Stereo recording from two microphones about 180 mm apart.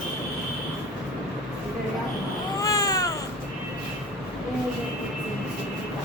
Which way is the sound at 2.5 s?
20° left (ahead or behind).